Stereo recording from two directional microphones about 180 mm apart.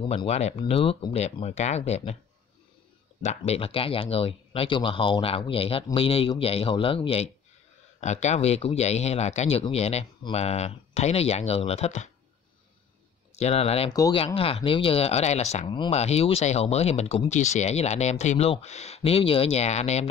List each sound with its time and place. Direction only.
0.0 s speech: 30° left (ahead or behind)
3.2 s speech: 40° left (ahead or behind)
13.4 s speech: 35° left (ahead or behind)